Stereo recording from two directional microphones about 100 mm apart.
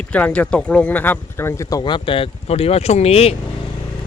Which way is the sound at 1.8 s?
55° left (ahead or behind).